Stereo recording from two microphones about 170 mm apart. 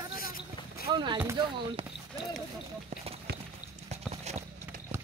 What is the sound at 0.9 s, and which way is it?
Speech, 25° right (ahead or behind).